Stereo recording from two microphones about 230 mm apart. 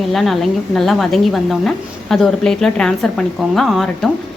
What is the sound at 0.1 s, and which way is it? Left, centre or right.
A woman's voice, centre.